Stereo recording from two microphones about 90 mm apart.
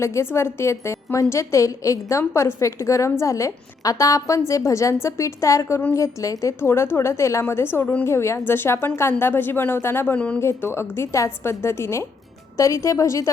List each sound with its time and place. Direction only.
0.0 s a woman's voice: 30° left (ahead or behind)